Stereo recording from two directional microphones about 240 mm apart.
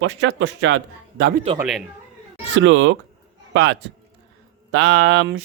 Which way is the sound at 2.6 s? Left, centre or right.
Right.